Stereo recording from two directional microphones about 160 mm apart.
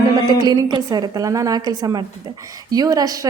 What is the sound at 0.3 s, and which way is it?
A woman's voice, 25° right (ahead or behind).